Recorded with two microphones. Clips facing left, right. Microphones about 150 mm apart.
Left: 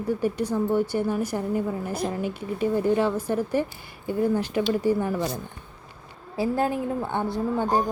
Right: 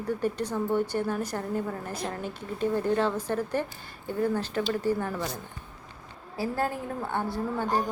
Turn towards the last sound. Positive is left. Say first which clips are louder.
# left 4 dB
turn(degrees=20)  # may be behind; listen again after turning